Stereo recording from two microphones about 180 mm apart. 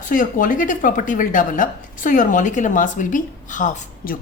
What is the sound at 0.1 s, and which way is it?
Speech, 50° left (ahead or behind).